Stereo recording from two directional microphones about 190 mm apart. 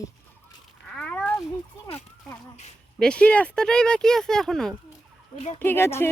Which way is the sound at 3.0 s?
5° left (ahead or behind).